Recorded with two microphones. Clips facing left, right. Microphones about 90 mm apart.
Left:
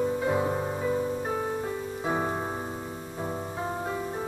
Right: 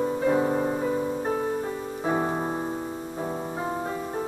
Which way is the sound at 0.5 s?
40° right (ahead or behind).